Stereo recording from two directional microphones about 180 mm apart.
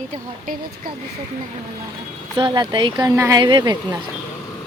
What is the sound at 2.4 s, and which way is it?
Speech, 25° right (ahead or behind).